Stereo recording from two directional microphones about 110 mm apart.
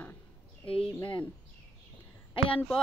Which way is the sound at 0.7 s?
50° left (ahead or behind).